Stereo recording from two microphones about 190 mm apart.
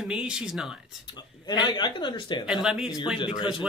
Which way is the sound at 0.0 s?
5° right (ahead or behind).